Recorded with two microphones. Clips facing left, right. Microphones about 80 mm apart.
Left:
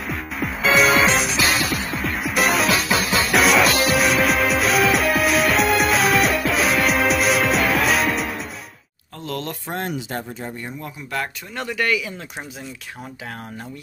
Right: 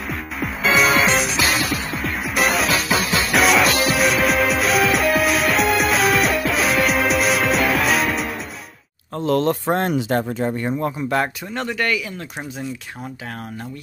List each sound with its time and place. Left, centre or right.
0.1 s music: centre
9.2 s speech: right
9.7 s speech: right
11.5 s speech: centre